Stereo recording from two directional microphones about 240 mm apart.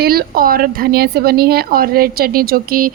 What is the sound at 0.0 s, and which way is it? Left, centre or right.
Speech, right.